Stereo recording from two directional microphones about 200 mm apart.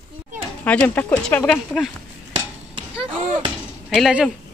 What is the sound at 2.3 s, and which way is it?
Hammer, 30° right (ahead or behind).